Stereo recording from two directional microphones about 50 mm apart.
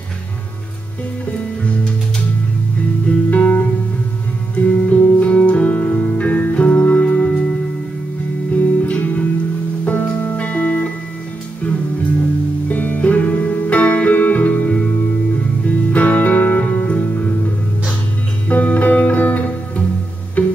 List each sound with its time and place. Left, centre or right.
3.3 s music: left
8.5 s music: left
12.6 s music: left
18.5 s music: left